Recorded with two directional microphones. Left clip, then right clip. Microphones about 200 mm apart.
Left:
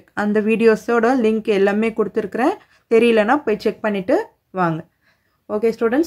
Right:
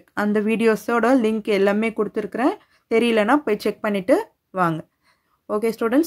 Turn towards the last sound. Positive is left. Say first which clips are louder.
# left 3 dB
turn(degrees=-35)  # may be behind; listen again after turning